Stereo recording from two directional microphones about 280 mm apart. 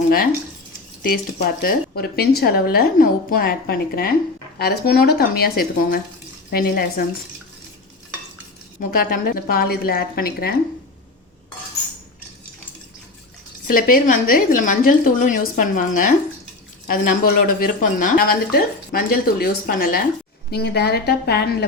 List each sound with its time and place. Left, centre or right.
1.0 s speech: left
8.8 s speech: left
13.7 s a woman's voice: left